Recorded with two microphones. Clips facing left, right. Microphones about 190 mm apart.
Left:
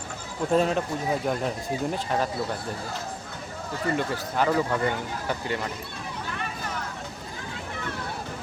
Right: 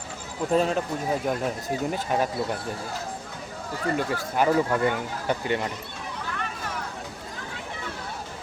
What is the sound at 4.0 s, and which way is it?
Speech, 10° right (ahead or behind).